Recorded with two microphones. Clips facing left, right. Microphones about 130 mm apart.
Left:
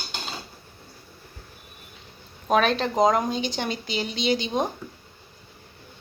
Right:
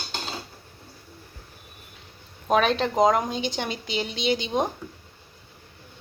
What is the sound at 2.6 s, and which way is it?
A woman's voice, 15° right (ahead or behind).